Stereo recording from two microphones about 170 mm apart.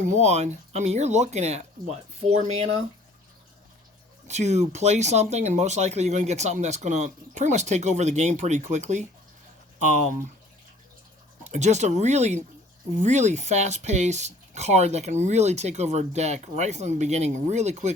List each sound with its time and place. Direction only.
0.0 s speech: 45° right (ahead or behind)
4.3 s speech: 40° right (ahead or behind)
11.4 s speech: 45° right (ahead or behind)